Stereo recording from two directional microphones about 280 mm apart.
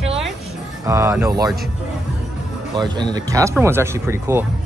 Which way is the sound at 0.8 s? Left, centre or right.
Centre.